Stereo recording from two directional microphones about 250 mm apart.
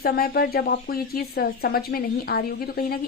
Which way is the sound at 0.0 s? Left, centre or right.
Left.